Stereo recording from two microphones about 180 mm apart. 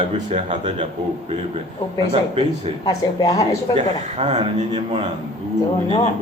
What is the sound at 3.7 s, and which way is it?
Speech, 40° right (ahead or behind).